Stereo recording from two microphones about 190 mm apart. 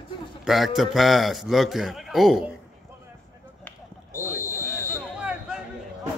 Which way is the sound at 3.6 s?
15° left (ahead or behind).